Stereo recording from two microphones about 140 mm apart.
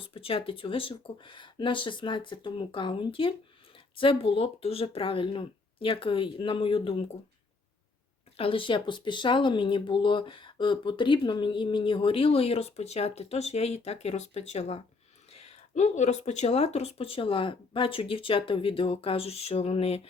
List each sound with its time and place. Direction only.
0.0 s speech: 40° left (ahead or behind)
8.4 s speech: 40° left (ahead or behind)